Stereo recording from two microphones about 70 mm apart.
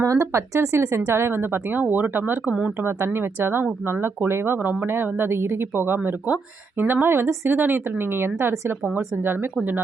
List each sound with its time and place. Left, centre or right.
0.0 s speech: right